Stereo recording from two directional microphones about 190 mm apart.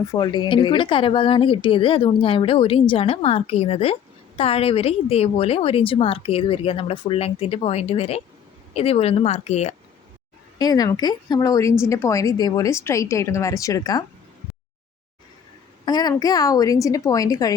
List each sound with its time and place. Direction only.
0.0 s a woman's voice: 20° left (ahead or behind); by 9.7 s 35° left (ahead or behind)
10.6 s a woman's voice: 20° left (ahead or behind)
15.9 s speech: 20° left (ahead or behind)